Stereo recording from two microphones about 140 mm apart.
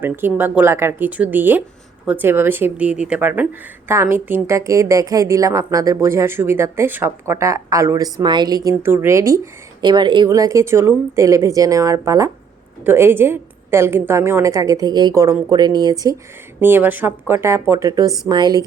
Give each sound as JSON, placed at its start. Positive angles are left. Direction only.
{"t": 0.0, "sound": "a woman's voice", "side_deg": -15}
{"t": 8.7, "sound": "a woman's voice", "side_deg": -15}
{"t": 10.2, "sound": "a woman's voice", "side_deg": -25}
{"t": 16.6, "sound": "a woman's voice", "side_deg": -15}